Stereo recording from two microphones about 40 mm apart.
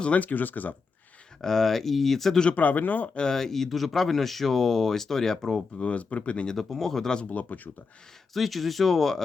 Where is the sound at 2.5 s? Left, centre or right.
Left.